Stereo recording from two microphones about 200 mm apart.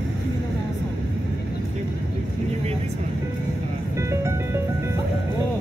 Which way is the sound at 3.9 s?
15° right (ahead or behind).